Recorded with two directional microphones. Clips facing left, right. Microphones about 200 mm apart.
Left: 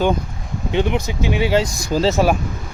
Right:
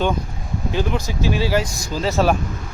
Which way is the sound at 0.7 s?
20° left (ahead or behind).